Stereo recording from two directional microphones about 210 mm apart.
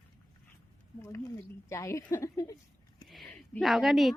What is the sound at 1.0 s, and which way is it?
Speech, 15° left (ahead or behind).